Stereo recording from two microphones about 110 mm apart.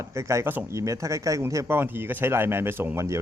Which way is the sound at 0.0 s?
25° right (ahead or behind).